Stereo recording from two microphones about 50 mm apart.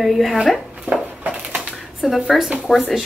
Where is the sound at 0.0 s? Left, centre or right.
Centre.